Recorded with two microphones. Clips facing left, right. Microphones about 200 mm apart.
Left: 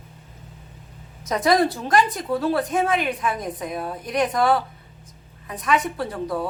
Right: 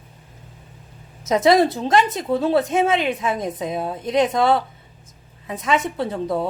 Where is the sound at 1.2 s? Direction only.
25° right (ahead or behind).